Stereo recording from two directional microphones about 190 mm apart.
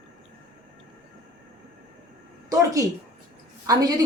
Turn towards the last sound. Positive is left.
turn(degrees=-20)  # may be behind; listen again after turning